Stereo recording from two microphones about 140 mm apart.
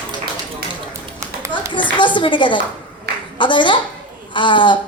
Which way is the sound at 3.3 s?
35° left (ahead or behind).